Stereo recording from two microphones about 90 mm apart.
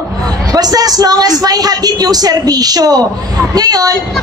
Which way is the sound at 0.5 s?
45° right (ahead or behind).